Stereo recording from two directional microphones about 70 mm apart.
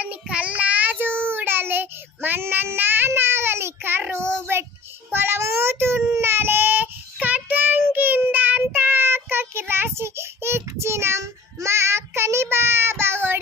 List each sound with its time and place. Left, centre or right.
0.0 s child singing: centre
3.1 s a sound: right
4.4 s child singing: right